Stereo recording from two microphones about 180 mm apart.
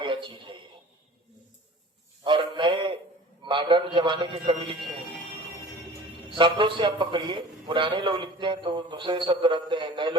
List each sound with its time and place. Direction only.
0.0 s a sound: 25° right (ahead or behind)
2.2 s a man's voice: 25° right (ahead or behind)
6.3 s a man's voice: 25° right (ahead or behind)